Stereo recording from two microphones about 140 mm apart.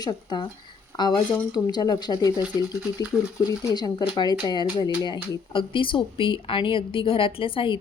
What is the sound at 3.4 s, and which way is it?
Speech, 30° left (ahead or behind).